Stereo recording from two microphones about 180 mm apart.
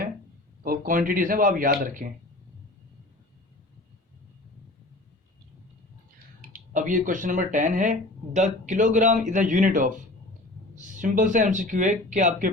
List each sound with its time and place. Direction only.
0.6 s speech: 50° right (ahead or behind)
6.5 s speech: 45° right (ahead or behind)